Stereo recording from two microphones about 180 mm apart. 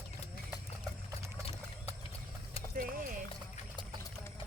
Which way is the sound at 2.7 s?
50° right (ahead or behind).